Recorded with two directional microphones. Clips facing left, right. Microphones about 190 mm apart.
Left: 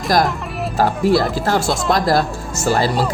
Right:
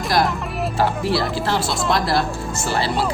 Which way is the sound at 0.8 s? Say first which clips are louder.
Left 6 dB; 45° left (ahead or behind).